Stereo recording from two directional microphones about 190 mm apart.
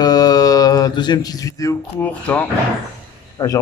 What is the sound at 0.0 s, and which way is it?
Mantra, 20° left (ahead or behind).